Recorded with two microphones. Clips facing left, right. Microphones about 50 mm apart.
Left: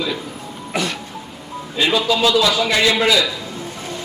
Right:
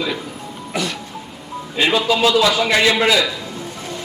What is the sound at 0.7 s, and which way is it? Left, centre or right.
Music, left.